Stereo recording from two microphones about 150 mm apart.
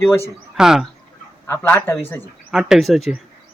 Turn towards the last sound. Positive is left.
turn(degrees=0)  # may be behind; listen again after turning